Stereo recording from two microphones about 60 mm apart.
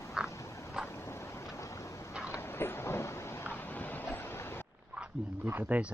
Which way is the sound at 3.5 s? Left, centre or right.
Left.